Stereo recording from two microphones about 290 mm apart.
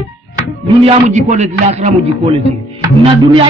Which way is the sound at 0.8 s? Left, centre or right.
Right.